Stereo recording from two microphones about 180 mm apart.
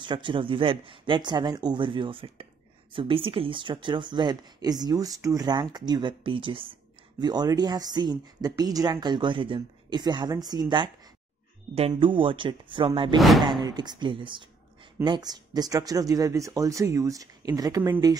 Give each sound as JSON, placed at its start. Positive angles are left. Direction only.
{"t": 0.0, "sound": "speech", "side_deg": -25}
{"t": 11.9, "sound": "speech", "side_deg": -30}